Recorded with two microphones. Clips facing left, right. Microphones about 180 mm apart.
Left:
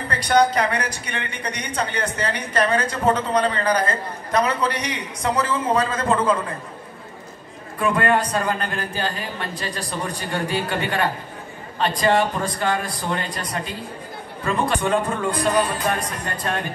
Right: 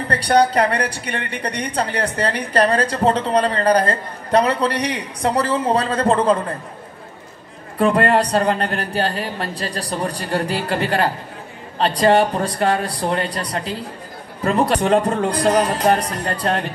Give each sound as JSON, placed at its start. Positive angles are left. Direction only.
{"t": 0.2, "sound": "a woman's voice", "side_deg": -35}
{"t": 7.8, "sound": "a woman's voice", "side_deg": -35}
{"t": 8.6, "sound": "speech", "side_deg": -70}
{"t": 9.4, "sound": "a woman's voice", "side_deg": -35}
{"t": 12.0, "sound": "a woman's voice", "side_deg": -35}
{"t": 13.3, "sound": "speech", "side_deg": -70}
{"t": 14.4, "sound": "a woman's voice", "side_deg": -40}
{"t": 15.2, "sound": "speech", "side_deg": -85}
{"t": 15.8, "sound": "a woman's voice", "side_deg": -35}